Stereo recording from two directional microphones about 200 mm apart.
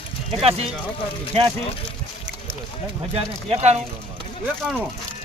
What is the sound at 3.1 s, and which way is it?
Speech, 30° right (ahead or behind).